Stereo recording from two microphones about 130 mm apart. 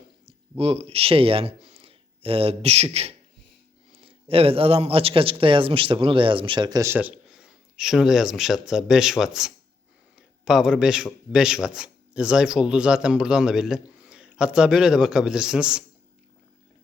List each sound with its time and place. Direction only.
0.3 s speech: 50° right (ahead or behind); by 6.9 s 30° right (ahead or behind)
6.9 s speech: 10° right (ahead or behind)